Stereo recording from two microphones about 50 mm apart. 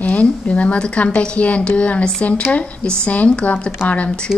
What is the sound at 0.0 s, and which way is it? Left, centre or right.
A woman's voice, left.